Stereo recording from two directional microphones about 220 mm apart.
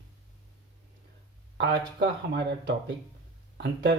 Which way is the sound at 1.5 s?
50° right (ahead or behind).